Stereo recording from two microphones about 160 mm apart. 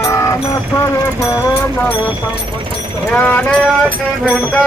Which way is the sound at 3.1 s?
10° left (ahead or behind).